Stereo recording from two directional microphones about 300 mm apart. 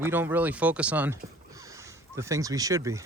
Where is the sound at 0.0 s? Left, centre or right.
Centre.